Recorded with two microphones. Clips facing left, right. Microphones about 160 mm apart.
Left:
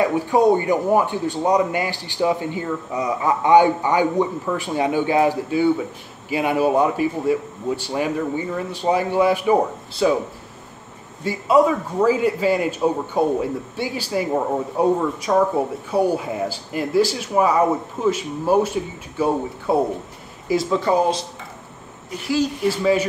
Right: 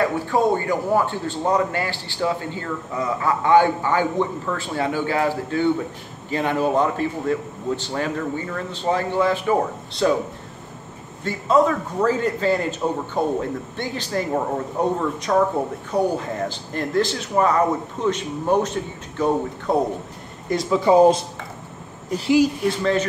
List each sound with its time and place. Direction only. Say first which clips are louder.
0.0 s a man's voice: left 3 dB; 20° left (ahead or behind)
11.2 s a man's voice: left 2 dB; 10° left (ahead or behind)
22.1 s speech: right 6 dB; 45° right (ahead or behind)
22.7 s a man's voice: left 2 dB; 10° left (ahead or behind)